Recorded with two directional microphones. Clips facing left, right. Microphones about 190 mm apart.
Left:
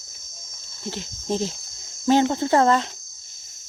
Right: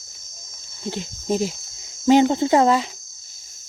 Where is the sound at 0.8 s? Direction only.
15° right (ahead or behind).